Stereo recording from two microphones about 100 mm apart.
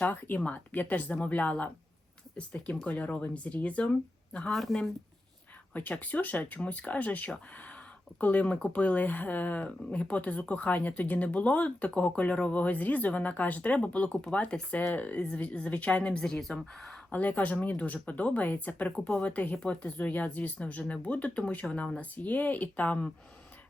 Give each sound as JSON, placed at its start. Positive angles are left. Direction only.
{"t": 0.0, "sound": "speech", "side_deg": 20}
{"t": 5.7, "sound": "speech", "side_deg": 15}
{"t": 17.1, "sound": "speech", "side_deg": 15}